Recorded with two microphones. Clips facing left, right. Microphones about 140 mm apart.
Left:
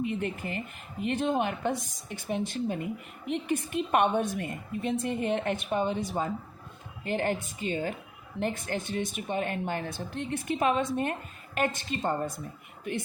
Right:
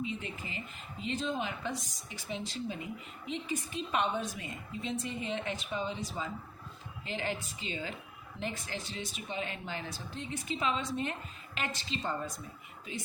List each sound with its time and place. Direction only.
0.0 s speech: 60° left (ahead or behind)
12.9 s speech: 65° left (ahead or behind)